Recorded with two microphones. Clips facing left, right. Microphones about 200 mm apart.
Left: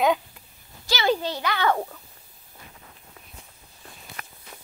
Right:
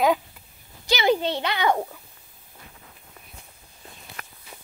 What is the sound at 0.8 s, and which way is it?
Speech, 20° right (ahead or behind).